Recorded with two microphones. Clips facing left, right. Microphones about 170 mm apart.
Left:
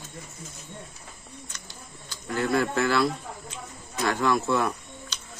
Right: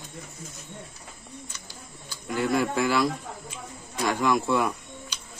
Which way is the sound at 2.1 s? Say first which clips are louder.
Even; 15° right (ahead or behind).